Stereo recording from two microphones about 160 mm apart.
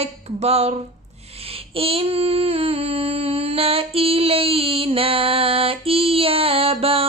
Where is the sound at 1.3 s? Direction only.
35° right (ahead or behind).